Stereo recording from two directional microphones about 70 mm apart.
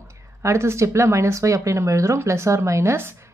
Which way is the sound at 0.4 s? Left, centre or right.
Right.